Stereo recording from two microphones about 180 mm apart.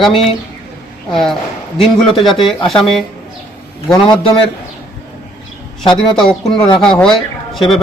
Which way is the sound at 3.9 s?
25° left (ahead or behind).